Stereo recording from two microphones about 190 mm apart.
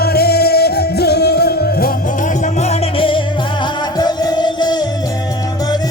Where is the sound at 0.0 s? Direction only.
55° left (ahead or behind); by 4.9 s 20° left (ahead or behind).